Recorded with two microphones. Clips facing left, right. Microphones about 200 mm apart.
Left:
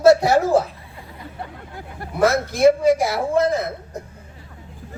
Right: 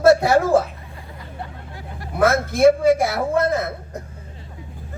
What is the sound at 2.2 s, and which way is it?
Speech, 55° right (ahead or behind).